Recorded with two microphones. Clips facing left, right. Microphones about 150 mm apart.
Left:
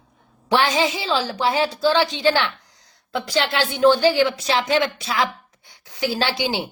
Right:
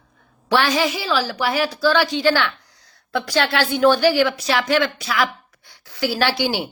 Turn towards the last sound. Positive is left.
turn(degrees=20)  # may be behind; listen again after turning